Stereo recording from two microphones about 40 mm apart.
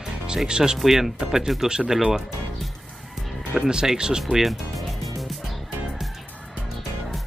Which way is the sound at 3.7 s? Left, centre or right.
Centre.